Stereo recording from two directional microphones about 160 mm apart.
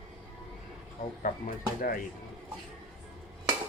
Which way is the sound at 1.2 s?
55° left (ahead or behind).